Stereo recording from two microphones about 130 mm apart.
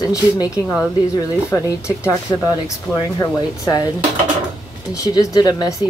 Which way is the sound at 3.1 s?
30° left (ahead or behind).